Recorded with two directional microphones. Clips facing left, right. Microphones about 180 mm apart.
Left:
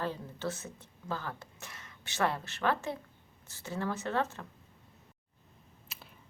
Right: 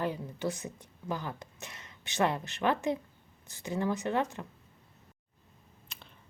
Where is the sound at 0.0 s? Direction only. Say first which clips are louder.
Right 3 dB; 15° right (ahead or behind).